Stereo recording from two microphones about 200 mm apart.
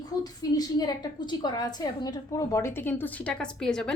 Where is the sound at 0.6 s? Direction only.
20° left (ahead or behind); by 3.9 s 5° left (ahead or behind).